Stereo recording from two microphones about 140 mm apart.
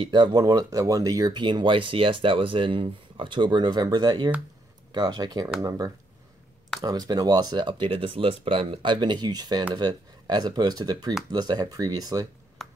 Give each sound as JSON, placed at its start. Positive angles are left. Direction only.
{"t": 0.0, "sound": "speech", "side_deg": -35}